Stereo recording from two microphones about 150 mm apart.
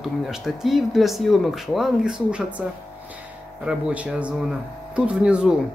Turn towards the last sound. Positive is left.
turn(degrees=-5)  # may be behind; listen again after turning